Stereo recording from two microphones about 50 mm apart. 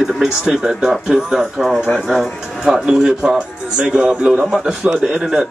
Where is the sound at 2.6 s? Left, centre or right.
Centre.